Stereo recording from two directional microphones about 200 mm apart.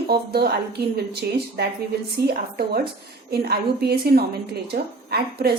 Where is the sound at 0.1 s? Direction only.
50° right (ahead or behind).